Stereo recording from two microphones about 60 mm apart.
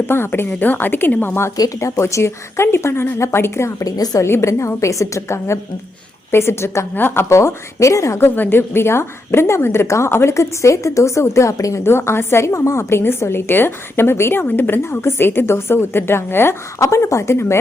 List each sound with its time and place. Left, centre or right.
0.1 s a woman's voice: left
1.5 s speech: left
2.0 s a woman's voice: left
3.8 s speech: left
4.2 s a woman's voice: left
6.9 s a woman's voice: left
8.2 s a woman's voice: left
11.8 s a woman's voice: left
16.8 s a woman's voice: left